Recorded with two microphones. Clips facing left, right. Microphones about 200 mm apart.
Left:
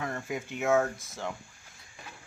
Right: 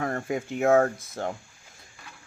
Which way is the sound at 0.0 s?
50° right (ahead or behind).